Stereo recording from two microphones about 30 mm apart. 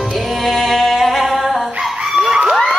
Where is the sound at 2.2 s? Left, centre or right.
Right.